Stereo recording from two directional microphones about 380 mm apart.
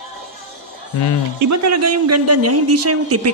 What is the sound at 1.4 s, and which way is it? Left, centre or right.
Speech, right.